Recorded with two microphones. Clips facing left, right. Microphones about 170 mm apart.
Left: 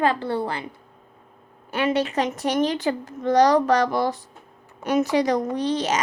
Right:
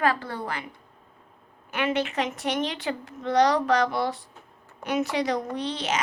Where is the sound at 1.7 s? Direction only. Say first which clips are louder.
Left 4 dB; 35° left (ahead or behind).